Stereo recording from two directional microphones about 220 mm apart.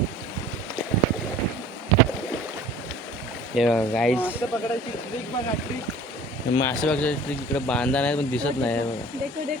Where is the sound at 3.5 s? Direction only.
Centre (ahead or behind).